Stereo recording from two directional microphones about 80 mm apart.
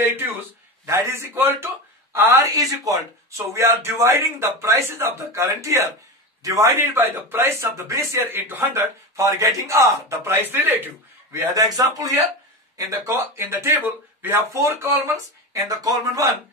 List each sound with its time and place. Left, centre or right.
0.0 s a man's voice: right
2.2 s speech: right
6.7 s speech: right
11.5 s speech: right
13.4 s speech: right